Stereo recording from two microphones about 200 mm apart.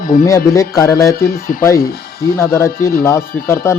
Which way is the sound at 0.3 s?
15° left (ahead or behind).